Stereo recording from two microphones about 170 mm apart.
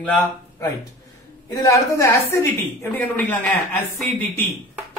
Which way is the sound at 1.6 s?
20° left (ahead or behind).